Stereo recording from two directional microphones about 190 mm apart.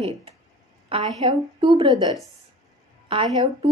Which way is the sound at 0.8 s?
25° right (ahead or behind).